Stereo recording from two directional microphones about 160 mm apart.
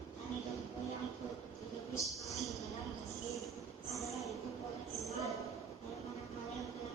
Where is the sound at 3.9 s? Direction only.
Centre (ahead or behind).